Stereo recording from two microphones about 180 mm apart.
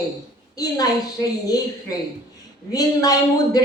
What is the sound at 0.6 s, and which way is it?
Speech, 20° left (ahead or behind).